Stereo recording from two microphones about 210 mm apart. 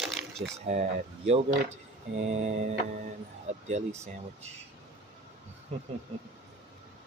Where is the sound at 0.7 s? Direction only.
35° right (ahead or behind).